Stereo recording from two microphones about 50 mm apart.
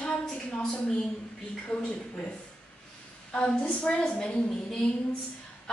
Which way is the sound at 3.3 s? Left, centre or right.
Left.